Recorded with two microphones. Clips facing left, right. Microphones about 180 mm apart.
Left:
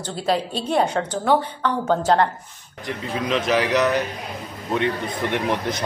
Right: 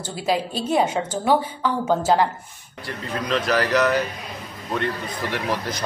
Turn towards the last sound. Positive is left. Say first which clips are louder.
# left 2 dB
turn(degrees=25)  # may be behind; listen again after turning